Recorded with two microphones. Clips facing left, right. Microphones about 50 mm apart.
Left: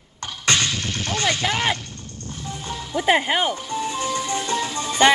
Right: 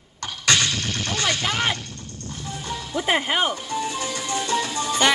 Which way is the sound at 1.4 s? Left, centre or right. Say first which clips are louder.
Left 2 dB; centre.